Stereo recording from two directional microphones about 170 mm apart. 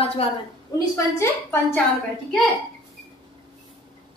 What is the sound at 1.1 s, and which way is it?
Speech, 15° left (ahead or behind).